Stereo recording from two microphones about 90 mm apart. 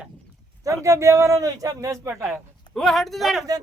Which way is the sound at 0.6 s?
35° right (ahead or behind).